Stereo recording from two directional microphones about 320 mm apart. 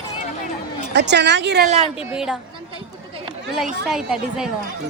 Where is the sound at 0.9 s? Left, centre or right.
Right.